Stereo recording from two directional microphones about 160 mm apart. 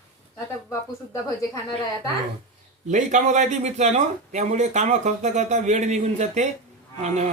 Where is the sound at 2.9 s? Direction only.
50° right (ahead or behind).